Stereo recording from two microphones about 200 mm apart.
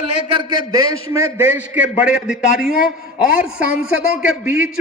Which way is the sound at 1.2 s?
10° right (ahead or behind).